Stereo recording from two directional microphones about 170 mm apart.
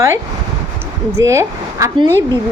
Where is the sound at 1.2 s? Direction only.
15° right (ahead or behind).